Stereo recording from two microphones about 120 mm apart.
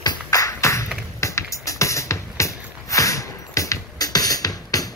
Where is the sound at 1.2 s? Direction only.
25° left (ahead or behind).